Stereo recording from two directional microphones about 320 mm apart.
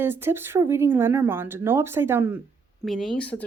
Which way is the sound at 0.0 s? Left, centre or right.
Centre.